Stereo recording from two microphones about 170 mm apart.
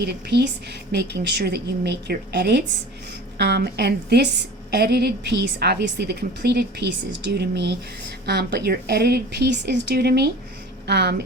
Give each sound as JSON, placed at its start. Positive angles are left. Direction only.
{"t": 0.0, "sound": "a woman's voice", "side_deg": -75}